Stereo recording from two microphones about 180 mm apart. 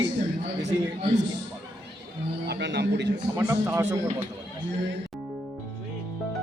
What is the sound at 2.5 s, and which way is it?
Speech, 75° right (ahead or behind).